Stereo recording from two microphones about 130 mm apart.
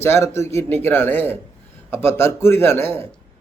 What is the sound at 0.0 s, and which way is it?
Speech, 20° left (ahead or behind).